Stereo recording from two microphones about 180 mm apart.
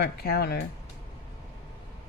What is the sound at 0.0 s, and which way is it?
Speech, 60° left (ahead or behind).